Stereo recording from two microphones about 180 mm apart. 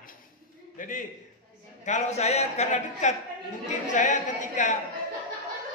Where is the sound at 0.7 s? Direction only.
45° left (ahead or behind).